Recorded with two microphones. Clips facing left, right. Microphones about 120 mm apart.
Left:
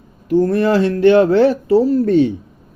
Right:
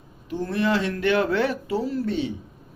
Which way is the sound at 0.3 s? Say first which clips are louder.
Left 10 dB; 45° left (ahead or behind).